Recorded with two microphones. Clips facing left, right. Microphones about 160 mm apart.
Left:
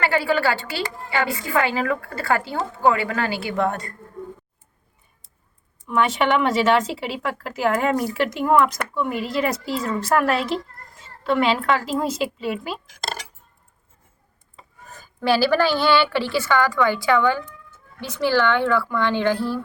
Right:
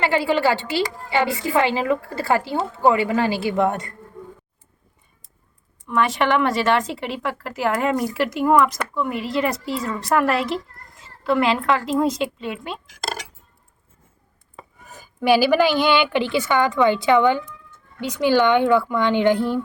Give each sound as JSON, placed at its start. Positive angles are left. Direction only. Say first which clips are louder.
{"t": 0.0, "sound": "a woman's voice", "louder": "right 1 dB", "side_deg": -20}
{"t": 5.9, "sound": "a woman's voice", "louder": "even", "side_deg": 0}
{"t": 14.8, "sound": "a woman's voice", "louder": "right 3 dB", "side_deg": -10}